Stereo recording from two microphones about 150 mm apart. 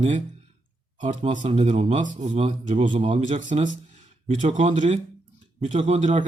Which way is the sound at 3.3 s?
55° right (ahead or behind).